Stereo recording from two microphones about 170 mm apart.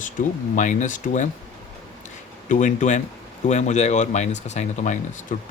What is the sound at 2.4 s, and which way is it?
Speech, 45° left (ahead or behind).